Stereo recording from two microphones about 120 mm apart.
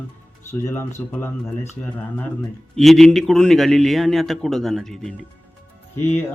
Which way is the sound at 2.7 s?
Centre (ahead or behind).